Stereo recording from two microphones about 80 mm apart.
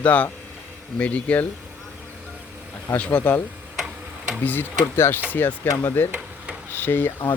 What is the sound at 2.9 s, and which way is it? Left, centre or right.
Speech, left.